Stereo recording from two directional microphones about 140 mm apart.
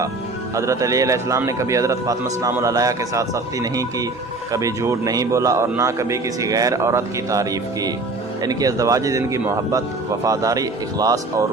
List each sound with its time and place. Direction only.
0.5 s a man's voice: 20° right (ahead or behind)